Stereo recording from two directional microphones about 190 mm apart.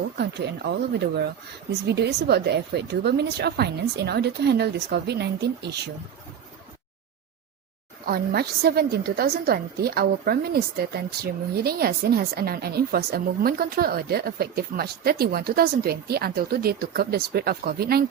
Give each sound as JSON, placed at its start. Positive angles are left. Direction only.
{"t": 0.2, "sound": "a woman's voice", "side_deg": -60}
{"t": 1.9, "sound": "a woman's voice", "side_deg": -60}
{"t": 8.0, "sound": "a woman's voice", "side_deg": -55}